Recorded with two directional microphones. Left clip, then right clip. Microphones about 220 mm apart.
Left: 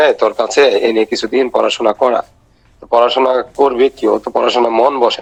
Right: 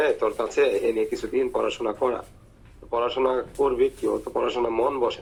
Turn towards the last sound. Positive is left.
turn(degrees=50)  # may be behind; listen again after turning